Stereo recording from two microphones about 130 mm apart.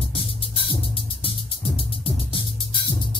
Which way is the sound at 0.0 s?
40° left (ahead or behind).